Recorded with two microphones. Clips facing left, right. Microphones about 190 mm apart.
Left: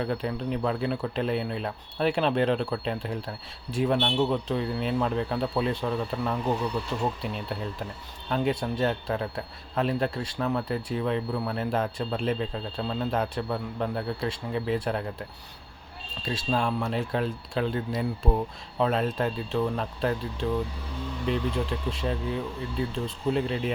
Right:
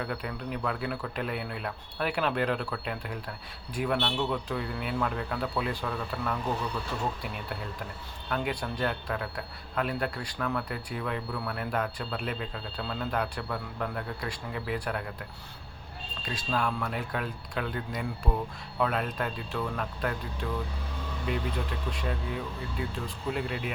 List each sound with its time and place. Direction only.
0.0 s speech: 25° left (ahead or behind)
8.3 s speech: 25° left (ahead or behind)
16.2 s speech: 25° left (ahead or behind)